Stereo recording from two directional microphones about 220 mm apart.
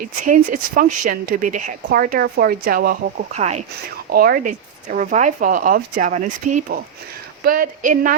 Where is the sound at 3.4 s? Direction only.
30° right (ahead or behind).